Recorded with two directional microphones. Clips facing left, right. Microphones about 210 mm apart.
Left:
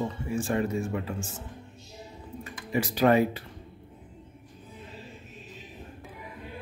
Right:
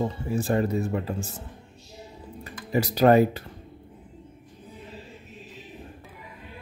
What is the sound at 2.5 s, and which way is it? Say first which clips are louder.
Speech: right 3 dB; 40° right (ahead or behind).